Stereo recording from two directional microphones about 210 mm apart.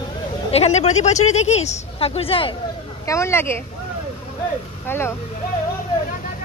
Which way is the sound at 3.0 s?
15° left (ahead or behind).